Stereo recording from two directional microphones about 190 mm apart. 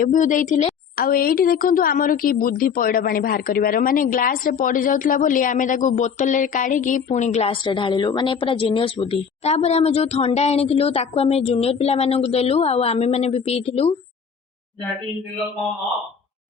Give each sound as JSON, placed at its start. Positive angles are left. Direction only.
{"t": 0.0, "sound": "a woman's voice", "side_deg": 45}